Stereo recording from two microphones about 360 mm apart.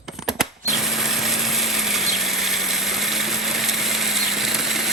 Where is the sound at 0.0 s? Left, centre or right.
Centre.